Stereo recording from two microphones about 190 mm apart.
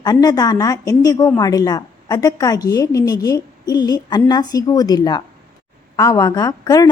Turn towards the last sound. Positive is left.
turn(degrees=20)  # may be behind; listen again after turning